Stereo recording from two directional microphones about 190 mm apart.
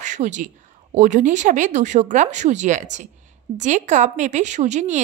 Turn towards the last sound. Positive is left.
turn(degrees=-35)  # may be behind; listen again after turning